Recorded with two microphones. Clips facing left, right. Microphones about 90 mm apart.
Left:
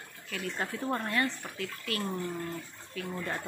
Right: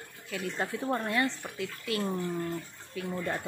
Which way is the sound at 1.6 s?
20° right (ahead or behind).